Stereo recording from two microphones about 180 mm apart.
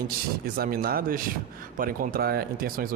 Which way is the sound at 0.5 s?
55° right (ahead or behind).